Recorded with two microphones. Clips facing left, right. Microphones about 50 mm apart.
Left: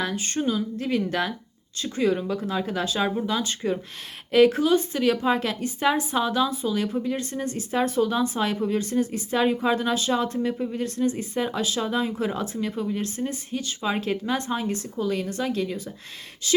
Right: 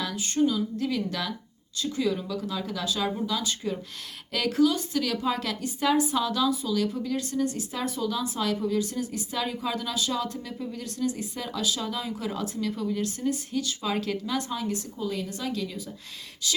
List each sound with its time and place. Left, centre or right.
0.0 s speech: left
14.9 s a woman's voice: left